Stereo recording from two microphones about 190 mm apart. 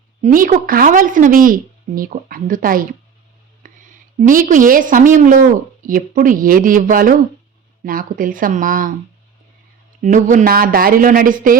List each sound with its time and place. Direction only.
0.2 s a woman's voice: 45° right (ahead or behind)
3.6 s a sound: 45° right (ahead or behind)
4.2 s a woman's voice: 45° right (ahead or behind)
10.0 s a woman's voice: 40° right (ahead or behind)